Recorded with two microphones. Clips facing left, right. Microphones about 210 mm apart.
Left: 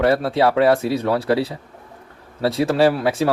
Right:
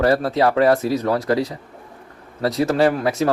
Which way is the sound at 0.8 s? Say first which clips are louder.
Even; 30° left (ahead or behind).